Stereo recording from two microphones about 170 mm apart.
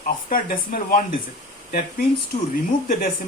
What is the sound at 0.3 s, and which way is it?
Speech, 55° left (ahead or behind).